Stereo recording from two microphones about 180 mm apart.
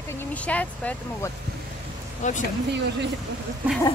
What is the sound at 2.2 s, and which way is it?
Speech, 40° left (ahead or behind).